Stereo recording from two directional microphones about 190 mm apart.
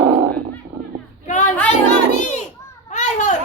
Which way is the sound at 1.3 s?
40° left (ahead or behind).